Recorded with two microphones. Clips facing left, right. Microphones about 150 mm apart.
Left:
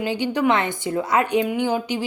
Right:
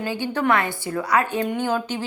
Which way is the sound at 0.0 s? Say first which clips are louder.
Left 3 dB; 15° left (ahead or behind).